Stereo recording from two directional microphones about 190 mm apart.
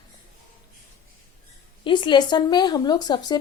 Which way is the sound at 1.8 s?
25° left (ahead or behind).